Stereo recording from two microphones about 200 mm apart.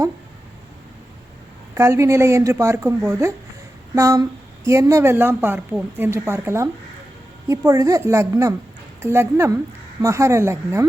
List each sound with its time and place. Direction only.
1.7 s a woman's voice: 15° right (ahead or behind)